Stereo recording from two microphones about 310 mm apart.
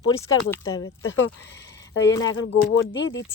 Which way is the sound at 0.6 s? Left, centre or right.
Left.